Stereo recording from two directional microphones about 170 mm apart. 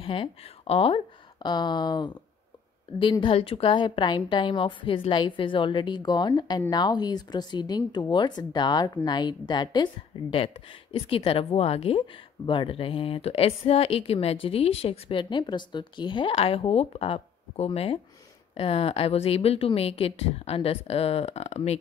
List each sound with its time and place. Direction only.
0.0 s a woman's voice: 30° left (ahead or behind)